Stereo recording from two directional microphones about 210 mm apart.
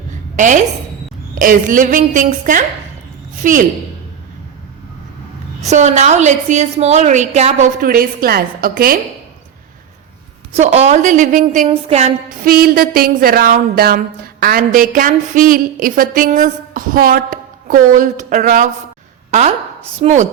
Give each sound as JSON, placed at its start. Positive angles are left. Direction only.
{"t": 0.3, "sound": "a woman's voice", "side_deg": -35}
{"t": 5.6, "sound": "a woman's voice", "side_deg": -35}
{"t": 10.5, "sound": "a woman's voice", "side_deg": -30}
{"t": 12.5, "sound": "a woman's voice", "side_deg": -45}